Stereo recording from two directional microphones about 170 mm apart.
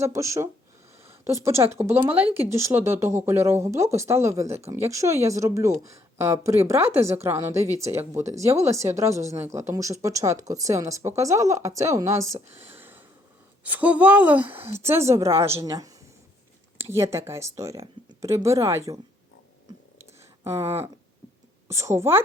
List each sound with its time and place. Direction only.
0.0 s a woman's voice: 20° right (ahead or behind)
12.8 s a sound: 10° right (ahead or behind)
13.7 s a woman's voice: 10° right (ahead or behind)
20.4 s speech: 20° right (ahead or behind)
21.7 s a woman's voice: 15° right (ahead or behind)